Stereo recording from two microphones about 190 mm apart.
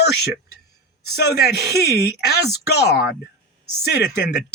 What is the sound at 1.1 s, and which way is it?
Speech, 60° left (ahead or behind).